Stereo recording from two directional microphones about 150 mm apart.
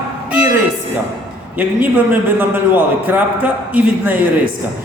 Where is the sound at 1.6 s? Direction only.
10° right (ahead or behind).